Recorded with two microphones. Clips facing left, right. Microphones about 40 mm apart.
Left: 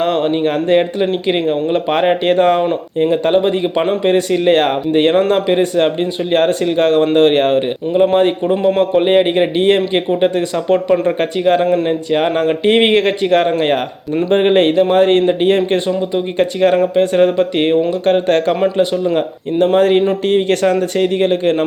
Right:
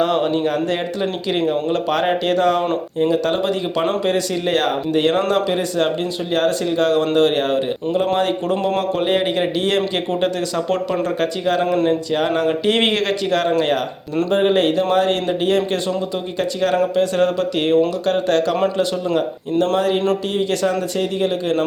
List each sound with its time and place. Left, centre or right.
0.0 s a sound: centre
0.3 s a man's voice: left
7.9 s a man's voice: left
8.8 s a man's voice: left
19.7 s a man's voice: left